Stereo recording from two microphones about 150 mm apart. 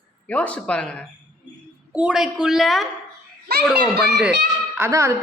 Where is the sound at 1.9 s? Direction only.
5° right (ahead or behind).